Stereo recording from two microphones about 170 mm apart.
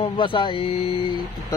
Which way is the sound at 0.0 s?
30° left (ahead or behind).